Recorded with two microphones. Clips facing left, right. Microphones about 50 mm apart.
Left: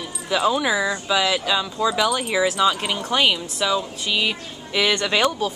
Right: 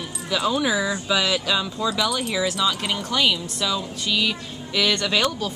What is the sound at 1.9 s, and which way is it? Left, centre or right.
Speech, centre.